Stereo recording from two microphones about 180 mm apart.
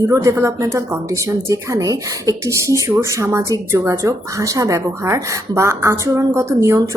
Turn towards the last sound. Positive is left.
turn(degrees=-15)  # may be behind; listen again after turning